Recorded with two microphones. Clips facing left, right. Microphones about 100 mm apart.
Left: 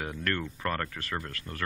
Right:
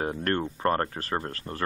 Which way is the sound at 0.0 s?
35° right (ahead or behind).